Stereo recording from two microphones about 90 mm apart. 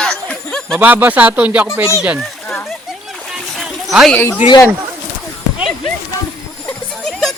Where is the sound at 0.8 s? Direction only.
20° right (ahead or behind).